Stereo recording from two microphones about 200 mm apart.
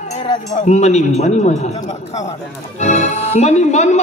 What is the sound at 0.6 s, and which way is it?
A man's voice, 35° left (ahead or behind).